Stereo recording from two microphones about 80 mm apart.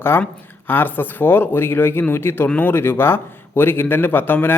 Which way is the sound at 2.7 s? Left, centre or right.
Left.